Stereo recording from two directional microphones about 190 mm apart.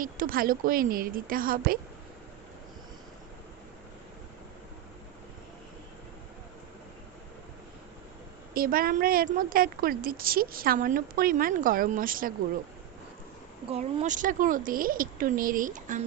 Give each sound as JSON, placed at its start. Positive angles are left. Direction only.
{"t": 0.0, "sound": "a woman's voice", "side_deg": -50}
{"t": 8.5, "sound": "a woman's voice", "side_deg": -50}
{"t": 13.7, "sound": "a woman's voice", "side_deg": -35}